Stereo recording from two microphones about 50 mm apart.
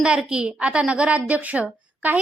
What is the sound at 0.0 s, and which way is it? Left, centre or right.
A woman's voice, centre.